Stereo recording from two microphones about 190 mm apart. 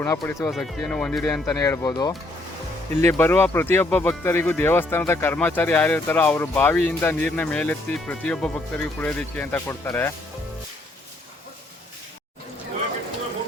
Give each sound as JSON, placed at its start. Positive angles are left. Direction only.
{"t": 0.0, "sound": "speech", "side_deg": 15}
{"t": 0.5, "sound": "speech", "side_deg": 5}
{"t": 1.5, "sound": "speech", "side_deg": 15}